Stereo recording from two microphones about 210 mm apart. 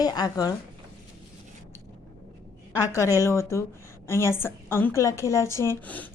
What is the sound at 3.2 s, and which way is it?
A woman's voice, 10° left (ahead or behind).